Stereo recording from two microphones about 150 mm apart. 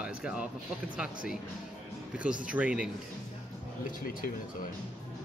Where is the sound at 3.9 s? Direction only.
65° left (ahead or behind).